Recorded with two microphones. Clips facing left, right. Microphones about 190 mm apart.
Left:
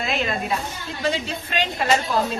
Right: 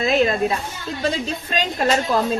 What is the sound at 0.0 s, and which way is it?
Speech, 40° right (ahead or behind).